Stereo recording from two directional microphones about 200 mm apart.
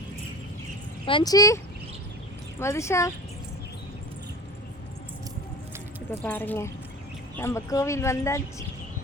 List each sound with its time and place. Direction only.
1.0 s speech: 20° left (ahead or behind)
2.6 s speech: 15° left (ahead or behind)
6.1 s speech: 10° left (ahead or behind)